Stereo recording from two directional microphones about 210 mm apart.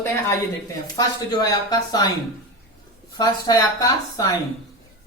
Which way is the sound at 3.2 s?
20° left (ahead or behind).